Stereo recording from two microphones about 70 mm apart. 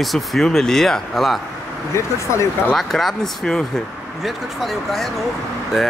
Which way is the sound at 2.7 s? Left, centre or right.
Centre.